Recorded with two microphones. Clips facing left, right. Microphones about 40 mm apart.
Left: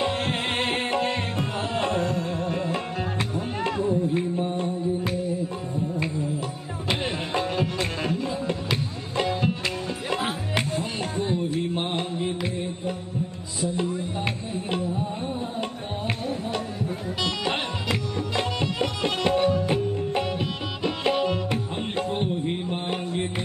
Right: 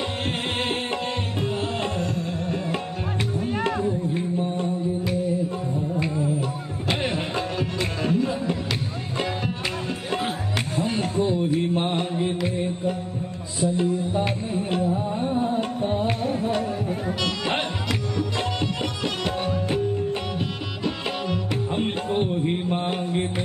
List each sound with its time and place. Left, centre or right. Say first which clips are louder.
0.6 s music: left 1 dB; left
6.9 s music: right 1 dB; centre
10.8 s music: right 5 dB; right
15.3 s music: right 7 dB; right